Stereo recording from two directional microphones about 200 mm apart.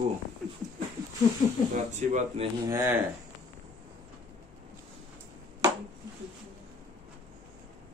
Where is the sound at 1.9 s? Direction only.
35° right (ahead or behind).